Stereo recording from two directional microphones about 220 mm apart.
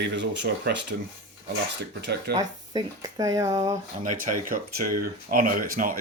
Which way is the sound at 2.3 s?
20° right (ahead or behind).